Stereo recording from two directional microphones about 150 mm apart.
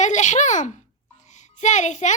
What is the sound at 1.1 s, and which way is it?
Music, 55° left (ahead or behind).